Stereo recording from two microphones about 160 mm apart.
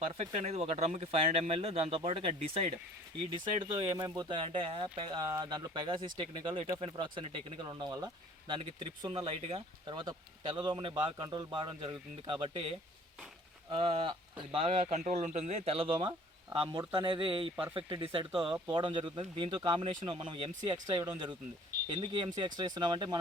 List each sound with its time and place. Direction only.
0.1 s speech: 40° right (ahead or behind)
13.7 s speech: 35° right (ahead or behind)
20.8 s speech: 20° right (ahead or behind)